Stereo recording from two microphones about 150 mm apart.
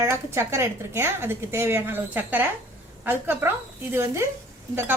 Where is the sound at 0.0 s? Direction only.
15° right (ahead or behind).